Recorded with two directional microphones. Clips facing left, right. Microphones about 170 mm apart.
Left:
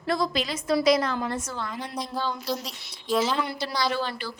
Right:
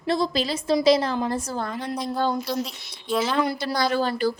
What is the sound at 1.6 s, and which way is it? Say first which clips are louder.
Speech: right 5 dB; 55° right (ahead or behind).